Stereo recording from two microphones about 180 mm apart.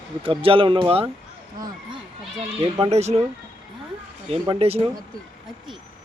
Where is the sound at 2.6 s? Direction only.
35° right (ahead or behind).